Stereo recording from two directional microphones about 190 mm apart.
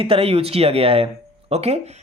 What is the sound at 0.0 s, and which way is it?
Speech, 30° right (ahead or behind).